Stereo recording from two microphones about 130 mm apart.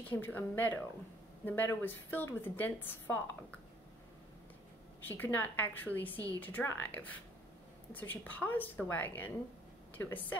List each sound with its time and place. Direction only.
0.0 s a woman's voice: 15° left (ahead or behind)
5.0 s a woman's voice: 15° left (ahead or behind)